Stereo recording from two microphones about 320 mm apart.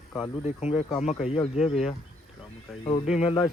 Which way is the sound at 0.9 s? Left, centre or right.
Centre.